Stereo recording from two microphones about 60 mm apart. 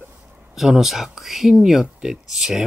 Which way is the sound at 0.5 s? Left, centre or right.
Centre.